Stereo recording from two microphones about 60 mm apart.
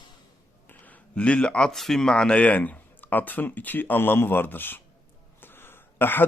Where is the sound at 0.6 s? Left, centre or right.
Left.